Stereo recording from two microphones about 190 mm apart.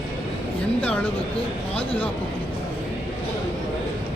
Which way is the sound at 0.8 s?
5° left (ahead or behind).